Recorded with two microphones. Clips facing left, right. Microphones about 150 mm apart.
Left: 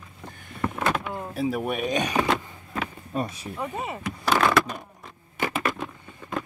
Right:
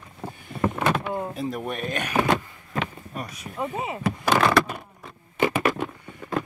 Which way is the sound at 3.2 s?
30° left (ahead or behind).